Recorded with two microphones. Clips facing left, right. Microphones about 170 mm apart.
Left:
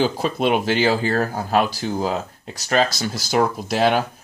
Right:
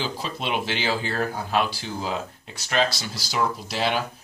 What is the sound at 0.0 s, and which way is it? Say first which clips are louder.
Speech: left 10 dB; 50° left (ahead or behind).